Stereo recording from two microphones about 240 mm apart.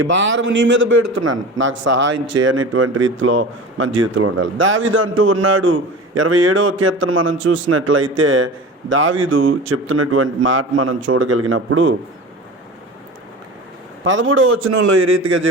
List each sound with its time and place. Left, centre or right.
0.0 s a man's voice: right
2.0 s speech: right
2.5 s a man's voice: right
14.0 s a man's voice: right